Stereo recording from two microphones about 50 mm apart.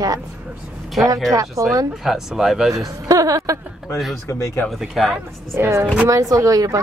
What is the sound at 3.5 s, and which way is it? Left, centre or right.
Speech, right.